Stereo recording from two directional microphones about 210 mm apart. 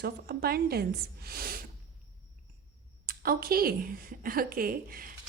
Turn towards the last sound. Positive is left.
turn(degrees=-45)  # may be behind; listen again after turning